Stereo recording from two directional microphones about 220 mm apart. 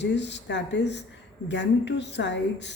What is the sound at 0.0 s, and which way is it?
A woman's voice, 50° left (ahead or behind).